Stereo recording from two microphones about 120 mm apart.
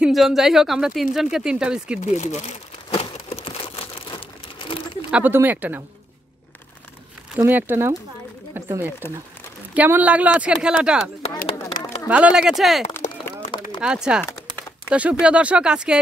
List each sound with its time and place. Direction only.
0.0 s a woman's voice: centre (ahead or behind)
2.0 s crumpling: 80° left; by 4.8 s 45° left (ahead or behind)
5.1 s speech: 15° right (ahead or behind)
7.4 s speech: 15° right (ahead or behind)
9.0 s speech: 20° left (ahead or behind)
9.8 s speech: 15° right (ahead or behind)
12.1 s a woman's voice: 10° right (ahead or behind)
13.0 s a sound: 90° left
13.7 s speech: 5° right (ahead or behind)